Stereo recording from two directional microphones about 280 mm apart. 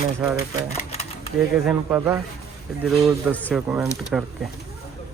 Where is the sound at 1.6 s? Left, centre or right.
Centre.